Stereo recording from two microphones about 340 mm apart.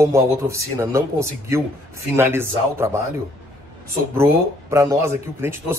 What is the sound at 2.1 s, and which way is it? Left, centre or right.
Speech, centre.